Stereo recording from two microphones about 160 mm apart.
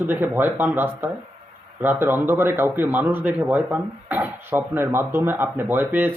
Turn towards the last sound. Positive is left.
turn(degrees=-10)  # may be behind; listen again after turning